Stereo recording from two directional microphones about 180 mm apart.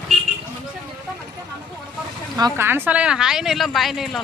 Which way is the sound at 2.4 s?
15° right (ahead or behind).